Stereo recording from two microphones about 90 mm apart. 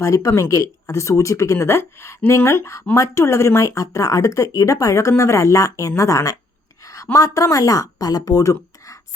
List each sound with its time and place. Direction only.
0.0 s speech: 35° left (ahead or behind)
6.8 s a sound: 35° left (ahead or behind)
7.3 s speech: 40° left (ahead or behind)